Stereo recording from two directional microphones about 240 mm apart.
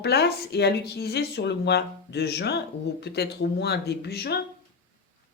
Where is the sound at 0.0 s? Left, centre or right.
Left.